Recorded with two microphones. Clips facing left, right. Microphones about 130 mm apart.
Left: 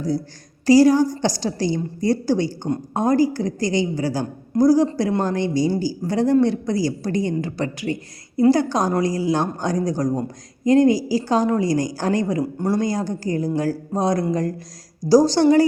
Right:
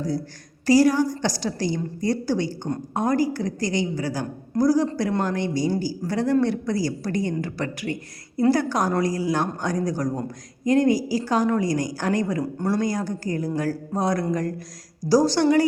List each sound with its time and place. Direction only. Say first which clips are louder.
0.7 s a woman's voice: left 4 dB; 30° left (ahead or behind)
12.4 s a woman's voice: left 2 dB; 15° left (ahead or behind)